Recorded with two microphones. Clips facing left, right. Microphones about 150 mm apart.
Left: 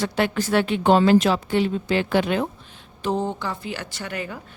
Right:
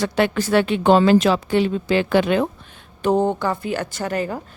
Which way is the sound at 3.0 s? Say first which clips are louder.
Right 6 dB; 55° right (ahead or behind).